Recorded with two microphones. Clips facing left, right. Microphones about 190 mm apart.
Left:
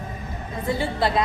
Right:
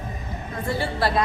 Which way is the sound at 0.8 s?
20° left (ahead or behind).